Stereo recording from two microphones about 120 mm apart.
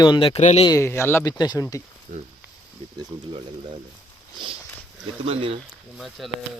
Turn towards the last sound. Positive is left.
turn(degrees=0)  # may be behind; listen again after turning